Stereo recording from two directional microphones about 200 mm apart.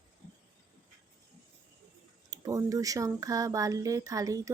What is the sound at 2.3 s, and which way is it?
Speech, 15° right (ahead or behind).